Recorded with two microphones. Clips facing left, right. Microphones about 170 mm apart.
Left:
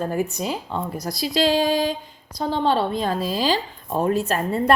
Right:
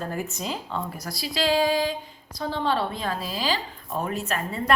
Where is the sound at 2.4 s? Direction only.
25° left (ahead or behind).